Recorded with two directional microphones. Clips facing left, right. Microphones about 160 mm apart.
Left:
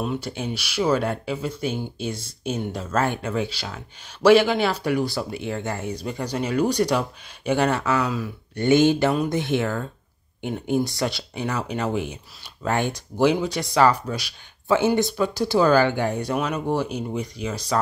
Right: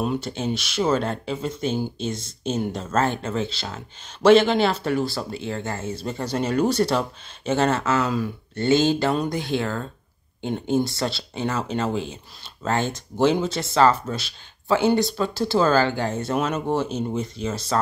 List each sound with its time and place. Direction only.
0.2 s speech: 10° left (ahead or behind)